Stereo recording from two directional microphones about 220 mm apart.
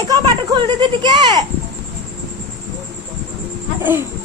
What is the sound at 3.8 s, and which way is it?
Speech, 10° right (ahead or behind).